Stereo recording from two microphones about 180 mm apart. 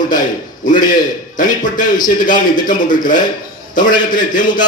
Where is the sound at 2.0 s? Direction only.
45° left (ahead or behind).